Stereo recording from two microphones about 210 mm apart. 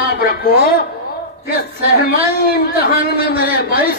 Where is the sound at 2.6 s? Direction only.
45° left (ahead or behind).